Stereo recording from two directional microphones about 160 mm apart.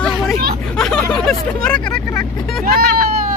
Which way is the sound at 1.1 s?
5° left (ahead or behind).